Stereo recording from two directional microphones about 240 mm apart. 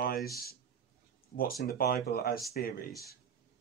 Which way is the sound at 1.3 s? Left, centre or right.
Left.